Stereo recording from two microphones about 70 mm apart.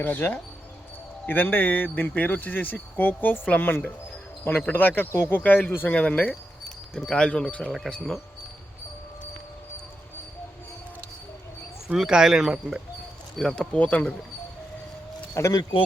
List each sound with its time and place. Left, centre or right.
0.0 s speech: left
5.4 s speech: left
11.9 s speech: centre
13.4 s speech: centre
15.4 s speech: left